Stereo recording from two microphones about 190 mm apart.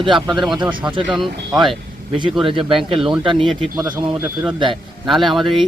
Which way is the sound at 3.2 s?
25° right (ahead or behind).